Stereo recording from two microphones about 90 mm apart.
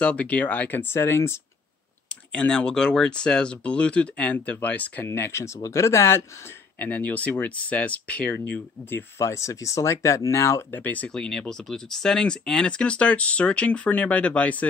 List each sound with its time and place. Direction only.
0.0 s speech: 15° left (ahead or behind)
2.0 s speech: 10° left (ahead or behind)
8.9 s speech: 30° left (ahead or behind)
10.8 s speech: 20° left (ahead or behind)
11.1 s speech: 5° left (ahead or behind)